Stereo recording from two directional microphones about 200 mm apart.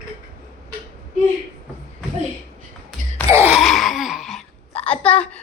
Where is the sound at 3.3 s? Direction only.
10° right (ahead or behind).